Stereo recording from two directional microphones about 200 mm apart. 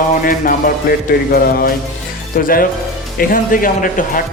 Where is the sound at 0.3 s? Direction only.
45° left (ahead or behind).